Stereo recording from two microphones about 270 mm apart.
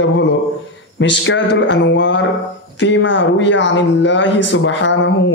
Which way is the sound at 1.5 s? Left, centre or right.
Left.